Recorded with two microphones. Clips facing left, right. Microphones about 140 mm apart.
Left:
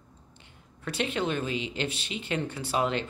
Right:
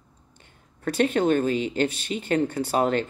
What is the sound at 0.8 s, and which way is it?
Speech, 45° right (ahead or behind).